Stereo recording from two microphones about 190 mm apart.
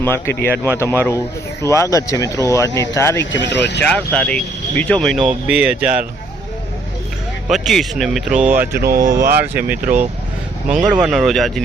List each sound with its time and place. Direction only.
0.0 s speech: 10° left (ahead or behind)
3.3 s speech: 70° left (ahead or behind)
3.8 s speech: 5° left (ahead or behind)
7.4 s speech: centre (ahead or behind); by 9.2 s 15° right (ahead or behind)
9.2 s speech: 50° right (ahead or behind)
10.7 s speech: 5° right (ahead or behind)